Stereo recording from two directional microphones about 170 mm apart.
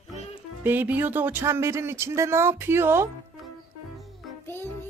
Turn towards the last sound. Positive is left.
turn(degrees=15)  # may be behind; listen again after turning